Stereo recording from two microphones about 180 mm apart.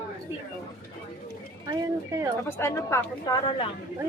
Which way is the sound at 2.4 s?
15° left (ahead or behind).